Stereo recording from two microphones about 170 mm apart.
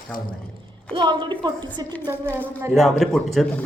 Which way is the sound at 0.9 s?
25° right (ahead or behind).